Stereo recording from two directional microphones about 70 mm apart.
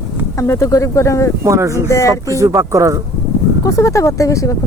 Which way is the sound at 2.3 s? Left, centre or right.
Right.